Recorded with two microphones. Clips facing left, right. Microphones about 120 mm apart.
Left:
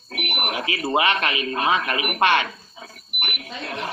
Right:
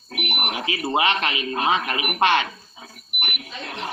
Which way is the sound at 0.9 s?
25° right (ahead or behind).